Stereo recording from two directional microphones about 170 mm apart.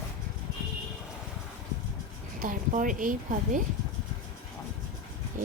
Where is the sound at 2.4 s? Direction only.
50° right (ahead or behind).